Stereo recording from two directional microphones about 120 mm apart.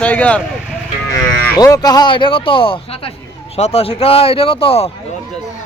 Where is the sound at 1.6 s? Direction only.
30° left (ahead or behind); by 3.1 s 50° left (ahead or behind).